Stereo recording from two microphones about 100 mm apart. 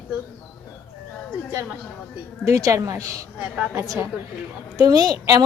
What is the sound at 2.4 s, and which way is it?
Speech, 35° right (ahead or behind).